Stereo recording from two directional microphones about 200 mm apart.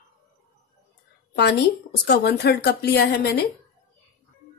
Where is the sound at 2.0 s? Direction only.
55° left (ahead or behind).